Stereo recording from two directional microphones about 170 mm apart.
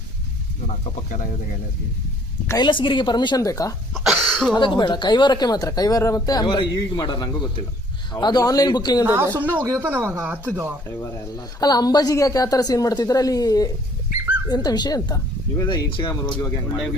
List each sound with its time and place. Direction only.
2.5 s speech: 25° left (ahead or behind)
3.9 s cough: centre (ahead or behind)
4.5 s speech: 25° left (ahead or behind)
9.0 s speech: 15° right (ahead or behind)
10.8 s speech: 20° left (ahead or behind)